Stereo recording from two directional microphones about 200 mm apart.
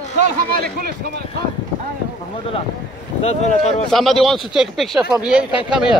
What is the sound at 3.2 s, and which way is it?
Speech, 35° left (ahead or behind).